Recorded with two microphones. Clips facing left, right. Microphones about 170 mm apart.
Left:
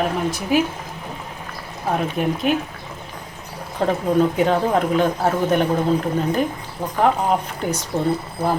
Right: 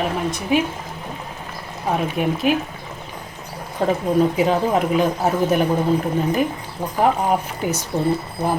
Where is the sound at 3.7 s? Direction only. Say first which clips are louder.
Even; 5° right (ahead or behind).